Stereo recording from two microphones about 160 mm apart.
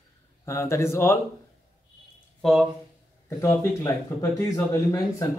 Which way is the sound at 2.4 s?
Centre (ahead or behind).